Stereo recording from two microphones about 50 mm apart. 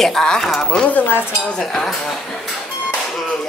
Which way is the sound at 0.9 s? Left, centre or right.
Left.